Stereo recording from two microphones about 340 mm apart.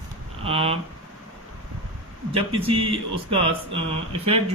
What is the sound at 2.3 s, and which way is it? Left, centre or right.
Speech, centre.